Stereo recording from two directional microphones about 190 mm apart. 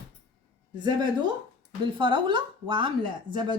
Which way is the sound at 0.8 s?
25° right (ahead or behind).